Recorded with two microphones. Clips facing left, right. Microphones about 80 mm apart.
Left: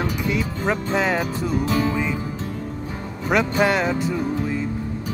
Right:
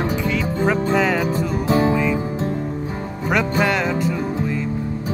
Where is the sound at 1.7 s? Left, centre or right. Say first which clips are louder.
Right 7 dB; right.